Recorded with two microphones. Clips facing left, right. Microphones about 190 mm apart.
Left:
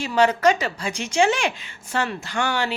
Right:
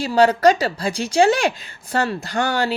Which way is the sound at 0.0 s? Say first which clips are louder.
Right 4 dB; 35° right (ahead or behind).